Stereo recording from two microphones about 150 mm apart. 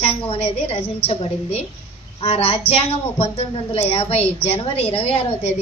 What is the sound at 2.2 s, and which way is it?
A woman's voice, 40° left (ahead or behind).